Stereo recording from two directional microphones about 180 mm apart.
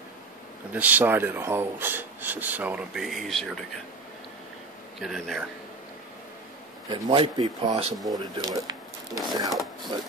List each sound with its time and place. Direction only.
0.7 s speech: 10° right (ahead or behind)
5.0 s speech: centre (ahead or behind)
6.9 s speech: 25° right (ahead or behind)
8.1 s speech: 20° right (ahead or behind)
9.5 s speech: centre (ahead or behind)